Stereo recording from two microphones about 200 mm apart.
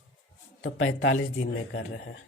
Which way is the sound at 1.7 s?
55° left (ahead or behind).